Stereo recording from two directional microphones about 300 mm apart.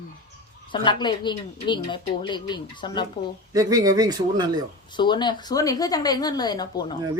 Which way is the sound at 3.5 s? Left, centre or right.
Centre.